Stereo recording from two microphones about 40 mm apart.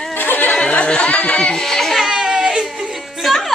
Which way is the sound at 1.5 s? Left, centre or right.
Centre.